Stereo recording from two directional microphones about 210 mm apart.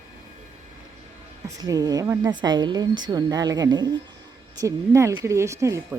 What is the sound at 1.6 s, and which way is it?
A woman's voice, 15° right (ahead or behind).